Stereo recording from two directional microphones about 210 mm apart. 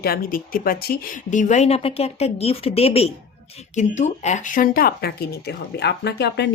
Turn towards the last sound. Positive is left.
turn(degrees=55)  # may be behind; listen again after turning